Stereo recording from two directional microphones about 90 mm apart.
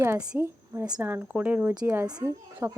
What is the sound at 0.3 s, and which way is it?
A woman's voice, 25° right (ahead or behind).